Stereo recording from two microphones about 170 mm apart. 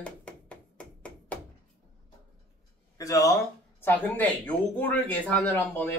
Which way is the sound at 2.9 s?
20° left (ahead or behind).